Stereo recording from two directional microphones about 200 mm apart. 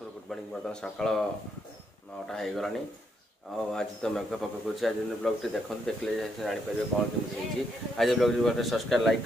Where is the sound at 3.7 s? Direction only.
5° left (ahead or behind).